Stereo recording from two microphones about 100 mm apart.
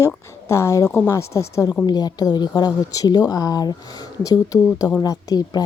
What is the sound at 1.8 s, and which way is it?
A woman's voice, 40° left (ahead or behind).